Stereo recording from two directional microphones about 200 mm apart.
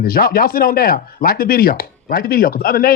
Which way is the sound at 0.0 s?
45° left (ahead or behind).